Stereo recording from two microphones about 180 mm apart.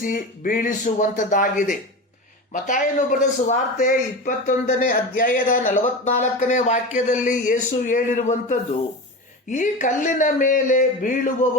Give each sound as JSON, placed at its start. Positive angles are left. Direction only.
{"t": 0.0, "sound": "a man's voice", "side_deg": 50}